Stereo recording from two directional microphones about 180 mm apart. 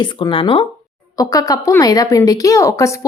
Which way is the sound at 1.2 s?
20° left (ahead or behind).